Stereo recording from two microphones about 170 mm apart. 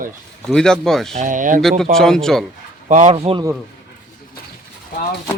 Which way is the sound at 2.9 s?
45° right (ahead or behind).